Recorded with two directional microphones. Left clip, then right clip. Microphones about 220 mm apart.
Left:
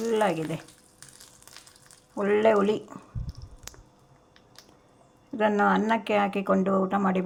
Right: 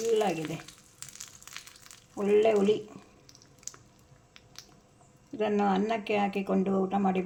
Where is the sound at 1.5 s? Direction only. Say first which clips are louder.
Right 4 dB; 20° right (ahead or behind).